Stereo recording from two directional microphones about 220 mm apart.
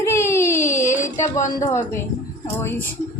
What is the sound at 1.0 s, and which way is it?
Speech, 30° left (ahead or behind).